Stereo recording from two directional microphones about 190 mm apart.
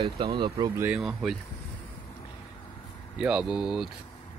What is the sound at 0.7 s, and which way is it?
Speech, 5° right (ahead or behind).